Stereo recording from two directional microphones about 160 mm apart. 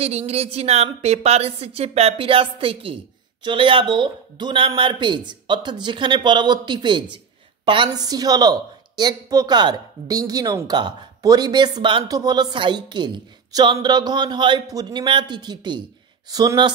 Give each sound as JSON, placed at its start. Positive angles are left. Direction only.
{"t": 0.0, "sound": "a woman's voice", "side_deg": -40}